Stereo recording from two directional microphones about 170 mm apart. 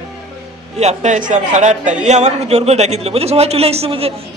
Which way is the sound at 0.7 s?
40° right (ahead or behind).